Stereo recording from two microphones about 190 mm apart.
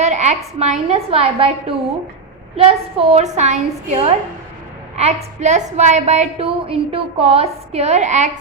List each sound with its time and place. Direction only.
0.0 s a woman's voice: 35° right (ahead or behind)